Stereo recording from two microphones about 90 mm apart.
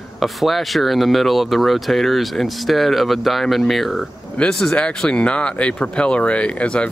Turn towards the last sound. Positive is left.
turn(degrees=10)  # may be behind; listen again after turning